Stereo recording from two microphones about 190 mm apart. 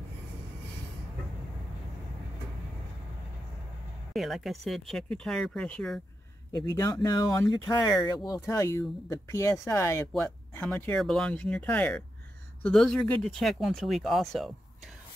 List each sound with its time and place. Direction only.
4.1 s speech: centre (ahead or behind)
6.5 s speech: 20° left (ahead or behind); by 14.5 s centre (ahead or behind)